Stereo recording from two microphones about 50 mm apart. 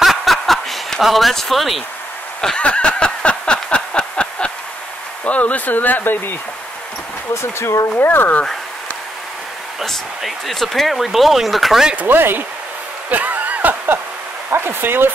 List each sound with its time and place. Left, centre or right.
0.0 s snicker: centre
1.0 s speech: centre
2.6 s a sound: left
5.2 s speech: left
7.5 s speech: left
8.0 s speech: left
9.8 s speech: centre
12.1 s speech: right
13.1 s a sound: right
14.5 s speech: right